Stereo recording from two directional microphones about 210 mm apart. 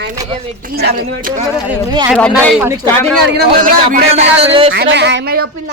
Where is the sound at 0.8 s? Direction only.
50° right (ahead or behind).